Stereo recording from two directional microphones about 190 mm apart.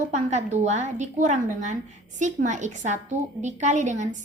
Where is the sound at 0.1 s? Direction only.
35° right (ahead or behind).